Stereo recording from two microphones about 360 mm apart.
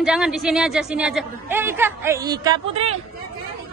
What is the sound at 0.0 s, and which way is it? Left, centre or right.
A woman's voice, centre.